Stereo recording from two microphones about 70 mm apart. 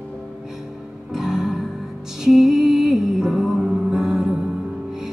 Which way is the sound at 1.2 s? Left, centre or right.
Centre.